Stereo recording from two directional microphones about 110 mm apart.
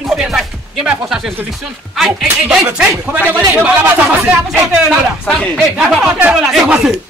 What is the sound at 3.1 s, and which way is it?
Speech, 15° right (ahead or behind).